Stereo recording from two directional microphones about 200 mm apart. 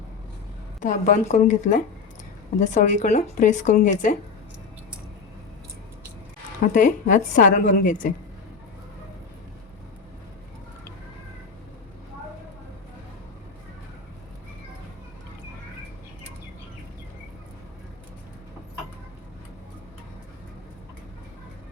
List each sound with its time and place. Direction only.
0.8 s speech: 40° left (ahead or behind)
6.7 s speech: 40° left (ahead or behind)